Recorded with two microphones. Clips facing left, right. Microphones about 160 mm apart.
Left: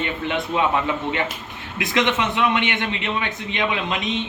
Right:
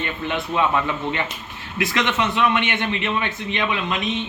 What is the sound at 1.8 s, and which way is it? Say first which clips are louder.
A man's voice: left 1 dB; 20° left (ahead or behind).